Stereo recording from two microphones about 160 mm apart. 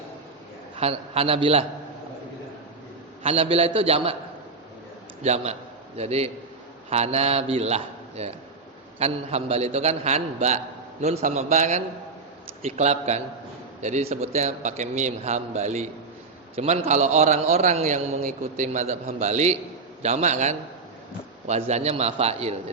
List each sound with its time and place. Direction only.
0.8 s a man's voice: 40° right (ahead or behind)
3.2 s a man's voice: 40° right (ahead or behind)
5.2 s a man's voice: 45° right (ahead or behind)